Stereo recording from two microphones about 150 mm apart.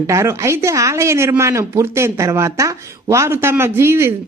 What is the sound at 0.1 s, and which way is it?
Speech, 20° right (ahead or behind).